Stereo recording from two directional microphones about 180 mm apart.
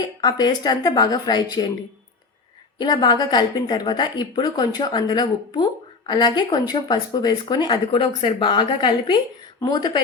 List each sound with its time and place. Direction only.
0.2 s speech: 20° left (ahead or behind)
2.7 s speech: 25° left (ahead or behind)